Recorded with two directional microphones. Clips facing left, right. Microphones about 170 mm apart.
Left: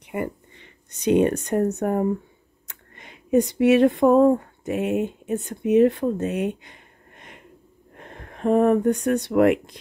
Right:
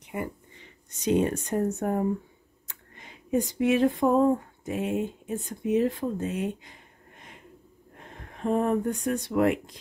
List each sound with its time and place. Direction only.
0.0 s speech: 60° left (ahead or behind)